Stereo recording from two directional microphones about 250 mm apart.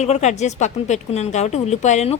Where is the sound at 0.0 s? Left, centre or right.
Left.